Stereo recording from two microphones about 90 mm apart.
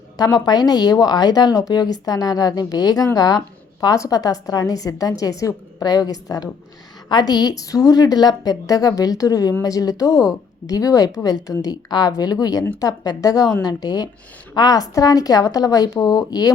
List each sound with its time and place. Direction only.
0.2 s a woman's voice: 50° left (ahead or behind)